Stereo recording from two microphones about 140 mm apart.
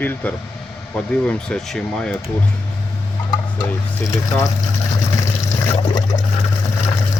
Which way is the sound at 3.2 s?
30° left (ahead or behind).